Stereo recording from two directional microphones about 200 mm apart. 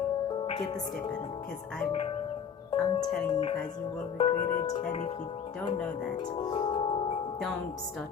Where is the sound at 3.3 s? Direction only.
30° left (ahead or behind).